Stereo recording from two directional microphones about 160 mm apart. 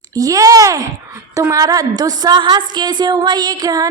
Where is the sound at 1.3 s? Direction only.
20° right (ahead or behind).